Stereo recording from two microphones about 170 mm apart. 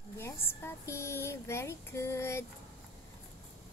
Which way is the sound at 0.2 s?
15° left (ahead or behind).